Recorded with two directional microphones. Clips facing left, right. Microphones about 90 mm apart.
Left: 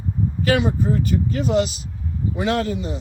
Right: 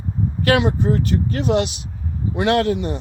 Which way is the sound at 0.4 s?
65° right (ahead or behind).